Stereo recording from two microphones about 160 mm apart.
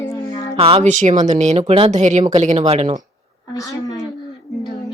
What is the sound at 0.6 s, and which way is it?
Speech, 35° right (ahead or behind).